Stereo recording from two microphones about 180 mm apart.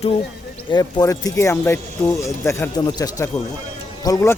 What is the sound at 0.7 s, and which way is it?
Speech, 20° left (ahead or behind).